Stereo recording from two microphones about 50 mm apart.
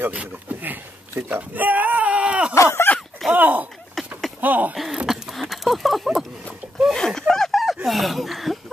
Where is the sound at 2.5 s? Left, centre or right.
Left.